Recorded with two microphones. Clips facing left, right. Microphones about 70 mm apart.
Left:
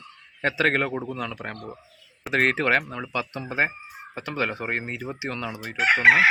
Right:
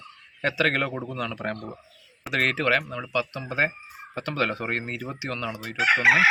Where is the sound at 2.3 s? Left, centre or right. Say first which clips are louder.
Left 2 dB; left.